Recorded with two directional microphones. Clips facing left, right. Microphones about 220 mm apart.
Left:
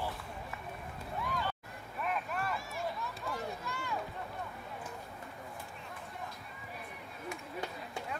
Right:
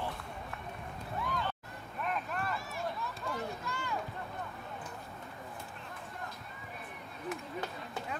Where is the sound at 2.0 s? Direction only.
5° left (ahead or behind).